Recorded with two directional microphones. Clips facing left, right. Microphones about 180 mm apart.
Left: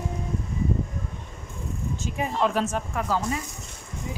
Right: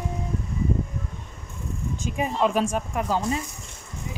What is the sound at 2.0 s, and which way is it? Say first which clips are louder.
Speech: right 2 dB; 15° right (ahead or behind).